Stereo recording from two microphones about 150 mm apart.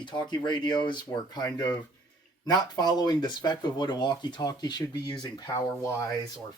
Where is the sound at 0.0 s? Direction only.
30° left (ahead or behind).